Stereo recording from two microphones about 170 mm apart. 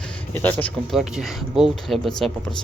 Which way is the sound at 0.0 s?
10° left (ahead or behind).